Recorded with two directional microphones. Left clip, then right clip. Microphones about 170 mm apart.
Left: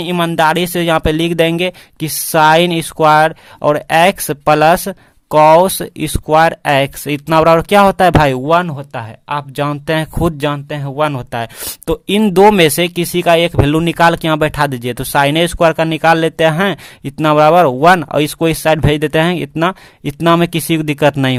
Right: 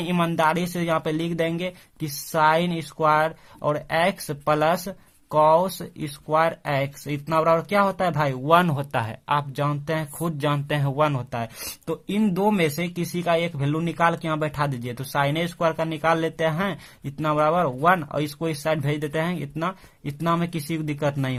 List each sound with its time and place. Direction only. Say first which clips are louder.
0.0 s speech: left 9 dB; 35° left (ahead or behind)
8.6 s speech: left 2 dB; 15° left (ahead or behind)
9.6 s speech: left 10 dB; 40° left (ahead or behind)
10.5 s speech: left 4 dB; 20° left (ahead or behind)
11.0 s speech: left 9 dB; 35° left (ahead or behind)
12.1 s speech: left 15 dB; 55° left (ahead or behind)